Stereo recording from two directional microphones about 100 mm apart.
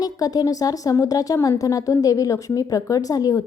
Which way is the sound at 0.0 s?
40° left (ahead or behind).